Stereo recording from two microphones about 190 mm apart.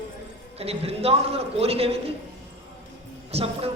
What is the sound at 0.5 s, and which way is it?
A man's voice, 30° right (ahead or behind).